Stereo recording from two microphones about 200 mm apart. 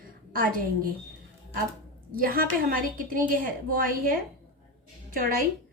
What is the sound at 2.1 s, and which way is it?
A woman's voice, 45° right (ahead or behind).